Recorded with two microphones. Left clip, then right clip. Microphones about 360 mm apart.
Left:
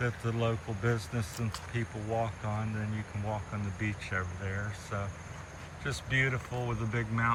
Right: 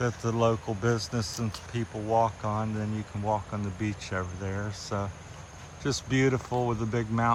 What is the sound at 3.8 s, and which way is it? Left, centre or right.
Speech, centre.